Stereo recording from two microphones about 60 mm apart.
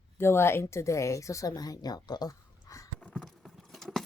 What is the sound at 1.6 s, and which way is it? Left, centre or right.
Speech, left.